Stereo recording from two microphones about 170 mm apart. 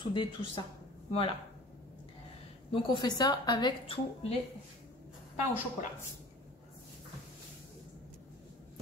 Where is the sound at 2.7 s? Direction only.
25° left (ahead or behind).